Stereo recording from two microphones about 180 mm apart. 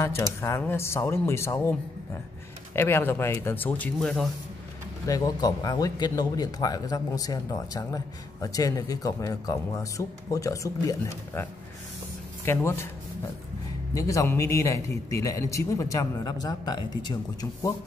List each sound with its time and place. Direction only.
0.0 s a man's voice: 15° left (ahead or behind)
5.0 s speech: 20° left (ahead or behind)
12.4 s a man's voice: 15° left (ahead or behind)
13.9 s a man's voice: 20° left (ahead or behind)